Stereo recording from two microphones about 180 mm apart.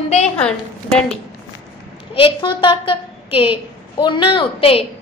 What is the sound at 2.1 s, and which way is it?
A woman's voice, 30° left (ahead or behind).